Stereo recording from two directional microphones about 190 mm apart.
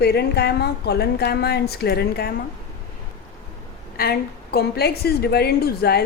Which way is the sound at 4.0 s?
55° left (ahead or behind).